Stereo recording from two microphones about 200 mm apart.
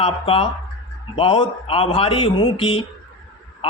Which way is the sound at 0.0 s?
30° left (ahead or behind).